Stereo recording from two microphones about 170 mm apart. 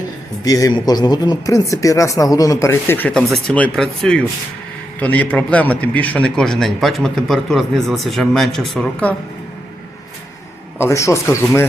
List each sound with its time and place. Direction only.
0.4 s a man's voice: 20° left (ahead or behind)
10.8 s speech: 15° left (ahead or behind)